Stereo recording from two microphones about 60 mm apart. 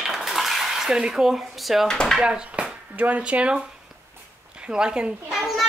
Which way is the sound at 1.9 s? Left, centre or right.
Centre.